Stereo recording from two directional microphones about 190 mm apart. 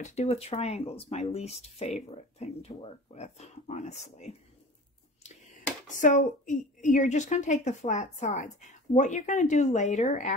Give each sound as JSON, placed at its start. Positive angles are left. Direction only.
{"t": 0.0, "sound": "speech", "side_deg": 35}
{"t": 5.9, "sound": "speech", "side_deg": 40}